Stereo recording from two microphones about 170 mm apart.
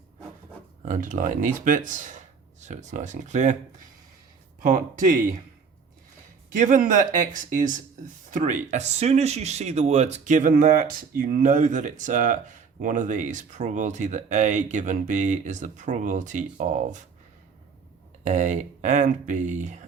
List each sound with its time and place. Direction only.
0.9 s speech: 50° right (ahead or behind)
4.7 s speech: 50° right (ahead or behind)
6.5 s speech: 50° right (ahead or behind)
18.2 s speech: 45° right (ahead or behind)